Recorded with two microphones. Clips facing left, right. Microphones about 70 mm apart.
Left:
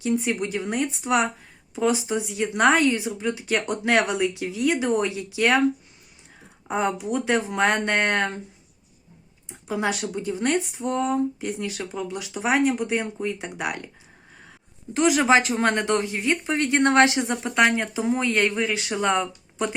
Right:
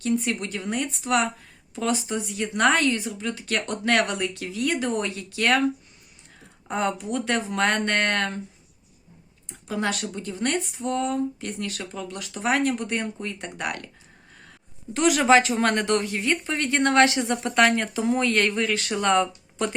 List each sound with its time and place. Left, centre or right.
0.0 s speech: centre
6.7 s speech: centre
9.5 s speech: centre
14.9 s speech: centre
16.6 s speech: left
17.3 s speech: centre